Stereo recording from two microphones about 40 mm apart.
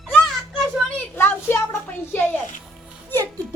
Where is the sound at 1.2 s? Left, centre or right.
Left.